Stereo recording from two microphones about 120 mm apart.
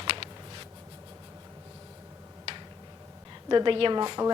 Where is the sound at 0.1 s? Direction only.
45° right (ahead or behind).